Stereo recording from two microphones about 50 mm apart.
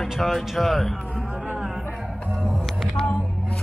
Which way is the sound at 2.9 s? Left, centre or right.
Centre.